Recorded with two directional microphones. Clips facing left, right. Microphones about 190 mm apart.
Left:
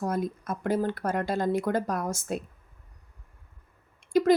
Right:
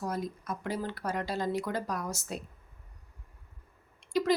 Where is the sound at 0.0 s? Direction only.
50° left (ahead or behind).